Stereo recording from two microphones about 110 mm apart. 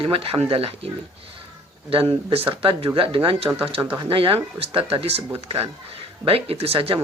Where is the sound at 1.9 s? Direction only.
55° right (ahead or behind).